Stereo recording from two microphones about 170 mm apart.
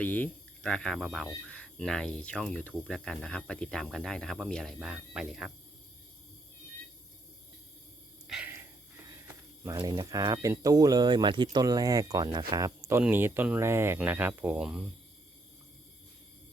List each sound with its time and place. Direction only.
0.0 s speech: 10° left (ahead or behind)
8.3 s a sound: 10° right (ahead or behind)
9.7 s speech: 25° right (ahead or behind)
12.9 s speech: 10° right (ahead or behind)